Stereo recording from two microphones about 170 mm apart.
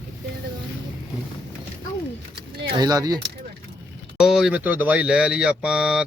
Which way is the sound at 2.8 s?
20° right (ahead or behind).